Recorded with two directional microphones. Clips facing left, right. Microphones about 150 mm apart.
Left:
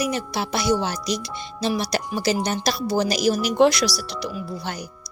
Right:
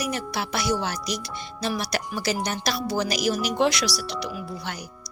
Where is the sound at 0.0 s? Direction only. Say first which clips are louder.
Left 4 dB; 25° left (ahead or behind).